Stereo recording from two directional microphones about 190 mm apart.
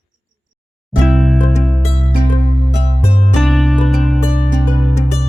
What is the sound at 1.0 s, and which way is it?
Music, centre (ahead or behind).